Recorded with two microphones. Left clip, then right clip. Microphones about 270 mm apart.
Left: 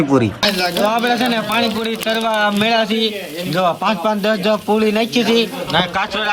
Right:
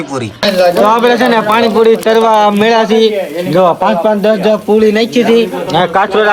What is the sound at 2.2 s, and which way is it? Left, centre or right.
Speech, centre.